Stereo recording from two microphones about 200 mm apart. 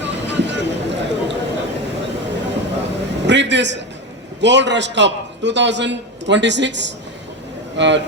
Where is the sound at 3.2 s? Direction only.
60° right (ahead or behind).